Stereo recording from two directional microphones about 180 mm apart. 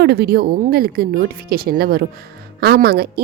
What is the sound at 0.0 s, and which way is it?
A woman's voice, 60° right (ahead or behind).